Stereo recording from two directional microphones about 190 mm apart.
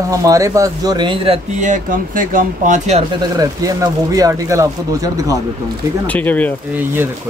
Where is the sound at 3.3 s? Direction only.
20° right (ahead or behind).